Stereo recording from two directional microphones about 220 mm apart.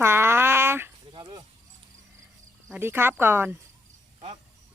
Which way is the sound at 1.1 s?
20° right (ahead or behind).